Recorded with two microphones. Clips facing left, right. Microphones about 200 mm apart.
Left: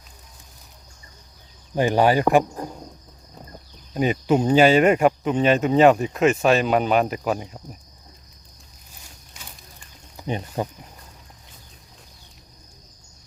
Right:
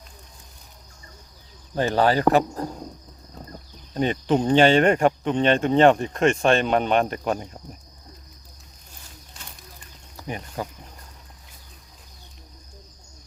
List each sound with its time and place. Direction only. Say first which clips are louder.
1.7 s speech: left 2 dB; 15° left (ahead or behind)
3.9 s speech: left 2 dB; 10° left (ahead or behind)
9.4 s a sound: even; centre (ahead or behind)
10.2 s speech: left 5 dB; 25° left (ahead or behind)